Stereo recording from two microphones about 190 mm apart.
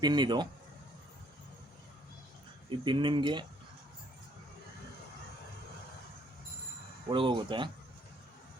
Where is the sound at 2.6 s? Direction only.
25° right (ahead or behind).